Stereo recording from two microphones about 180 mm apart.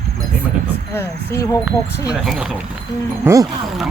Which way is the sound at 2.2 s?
Centre (ahead or behind).